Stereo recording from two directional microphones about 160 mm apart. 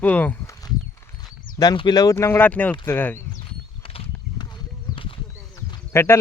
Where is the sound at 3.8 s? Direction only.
35° left (ahead or behind).